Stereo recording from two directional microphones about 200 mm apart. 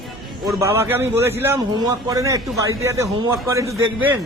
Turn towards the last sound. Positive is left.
turn(degrees=-10)  # may be behind; listen again after turning